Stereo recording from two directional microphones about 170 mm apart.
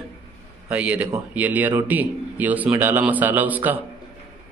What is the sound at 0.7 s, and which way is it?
Mantra, 10° right (ahead or behind).